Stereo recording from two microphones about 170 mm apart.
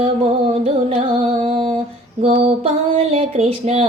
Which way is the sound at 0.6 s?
35° right (ahead or behind).